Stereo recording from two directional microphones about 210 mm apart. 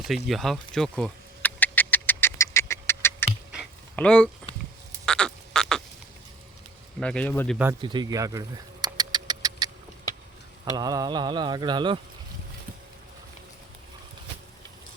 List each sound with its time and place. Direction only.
0.3 s a sound: centre (ahead or behind)
3.9 s speech: 5° left (ahead or behind)
5.0 s frog: 5° left (ahead or behind)
7.0 s speech: 5° left (ahead or behind)
7.8 s vehicle: 20° right (ahead or behind)
10.8 s insect: 20° right (ahead or behind)